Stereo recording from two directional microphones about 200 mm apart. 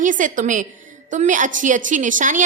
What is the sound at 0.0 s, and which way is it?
A woman's voice, 40° right (ahead or behind).